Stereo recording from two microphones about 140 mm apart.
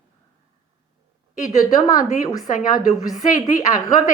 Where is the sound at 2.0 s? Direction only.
65° left (ahead or behind).